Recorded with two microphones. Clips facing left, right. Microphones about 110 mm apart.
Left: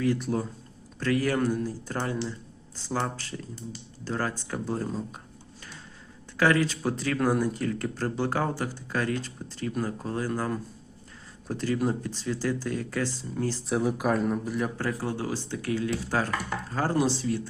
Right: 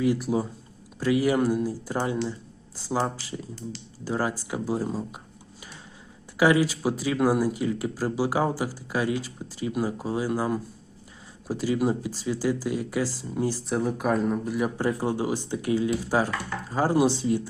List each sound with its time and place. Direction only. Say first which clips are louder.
0.0 s speech: right 3 dB; 10° right (ahead or behind)
6.3 s speech: right 3 dB; 10° right (ahead or behind)
13.7 s speech: left 2 dB; centre (ahead or behind)
14.8 s speech: right 4 dB; 15° right (ahead or behind)